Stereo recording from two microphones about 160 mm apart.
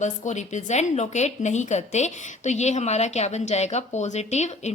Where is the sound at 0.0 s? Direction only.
50° left (ahead or behind).